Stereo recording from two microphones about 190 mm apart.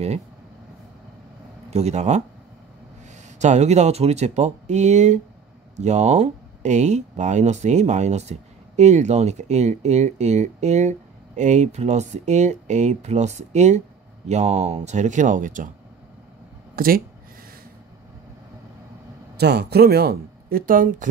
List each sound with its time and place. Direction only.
1.7 s speech: 35° right (ahead or behind)
3.3 s speech: 35° right (ahead or behind)
16.7 s speech: 50° right (ahead or behind)
19.3 s speech: 60° right (ahead or behind)